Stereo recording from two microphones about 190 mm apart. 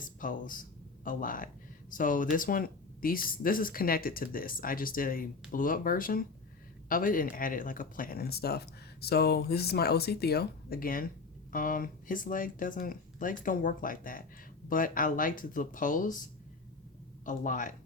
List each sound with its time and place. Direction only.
0.0 s speech: 45° left (ahead or behind)
17.2 s speech: 45° left (ahead or behind)